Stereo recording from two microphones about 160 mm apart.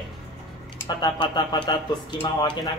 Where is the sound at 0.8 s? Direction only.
30° left (ahead or behind).